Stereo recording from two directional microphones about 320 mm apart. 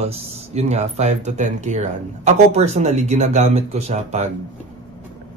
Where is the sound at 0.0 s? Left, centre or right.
Centre.